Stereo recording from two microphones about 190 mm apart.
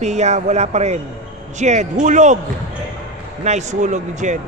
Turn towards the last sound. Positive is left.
turn(degrees=-40)  # may be behind; listen again after turning